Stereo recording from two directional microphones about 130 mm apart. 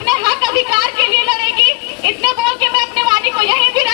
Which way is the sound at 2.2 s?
35° right (ahead or behind).